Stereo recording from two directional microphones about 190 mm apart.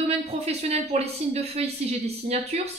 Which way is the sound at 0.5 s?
35° right (ahead or behind).